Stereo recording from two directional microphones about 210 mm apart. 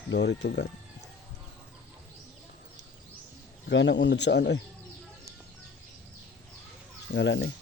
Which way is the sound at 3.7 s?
60° left (ahead or behind).